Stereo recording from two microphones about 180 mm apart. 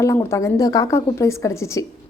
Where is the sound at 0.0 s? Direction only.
15° left (ahead or behind).